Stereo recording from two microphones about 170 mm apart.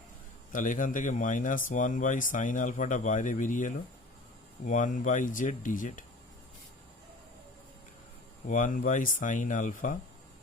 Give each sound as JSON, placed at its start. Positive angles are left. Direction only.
{"t": 0.5, "sound": "speech", "side_deg": 50}
{"t": 8.4, "sound": "speech", "side_deg": 50}